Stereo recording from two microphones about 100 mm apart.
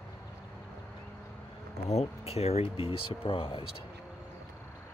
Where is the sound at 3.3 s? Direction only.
55° left (ahead or behind).